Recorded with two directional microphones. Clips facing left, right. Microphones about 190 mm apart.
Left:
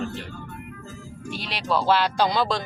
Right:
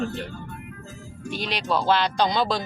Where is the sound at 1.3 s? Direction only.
5° left (ahead or behind).